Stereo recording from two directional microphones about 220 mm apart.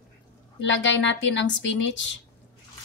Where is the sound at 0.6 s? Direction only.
55° left (ahead or behind).